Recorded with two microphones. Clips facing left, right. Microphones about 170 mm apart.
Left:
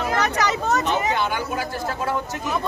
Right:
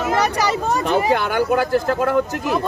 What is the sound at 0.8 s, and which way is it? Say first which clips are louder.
Speech: right 4 dB; 55° right (ahead or behind).